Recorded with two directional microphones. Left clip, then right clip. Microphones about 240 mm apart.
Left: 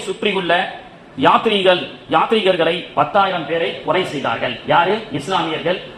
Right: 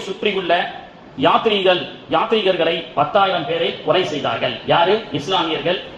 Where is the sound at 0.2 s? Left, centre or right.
Left.